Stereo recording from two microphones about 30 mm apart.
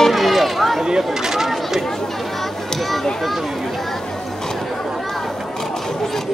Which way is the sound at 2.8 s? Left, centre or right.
Centre.